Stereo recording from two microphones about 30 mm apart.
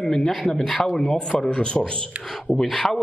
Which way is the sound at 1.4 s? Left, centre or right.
Left.